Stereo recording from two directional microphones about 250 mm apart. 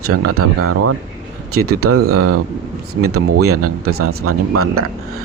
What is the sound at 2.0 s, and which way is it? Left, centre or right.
Speech, right.